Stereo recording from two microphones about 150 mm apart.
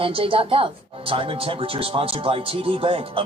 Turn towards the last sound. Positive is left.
turn(degrees=-40)  # may be behind; listen again after turning